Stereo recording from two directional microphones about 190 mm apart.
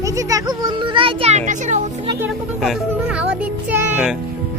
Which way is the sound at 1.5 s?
40° right (ahead or behind).